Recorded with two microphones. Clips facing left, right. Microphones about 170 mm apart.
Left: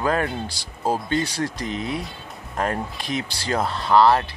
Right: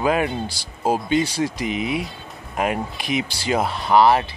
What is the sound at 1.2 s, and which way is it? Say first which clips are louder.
Speech: right 3 dB; 5° right (ahead or behind).